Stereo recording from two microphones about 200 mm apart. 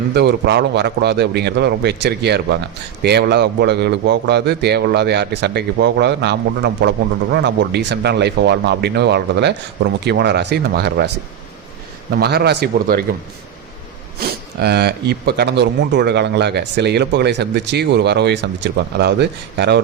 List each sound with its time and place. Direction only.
0.1 s a man's voice: 55° right (ahead or behind)
12.1 s a man's voice: 55° right (ahead or behind)
14.2 s a man's voice: 55° right (ahead or behind)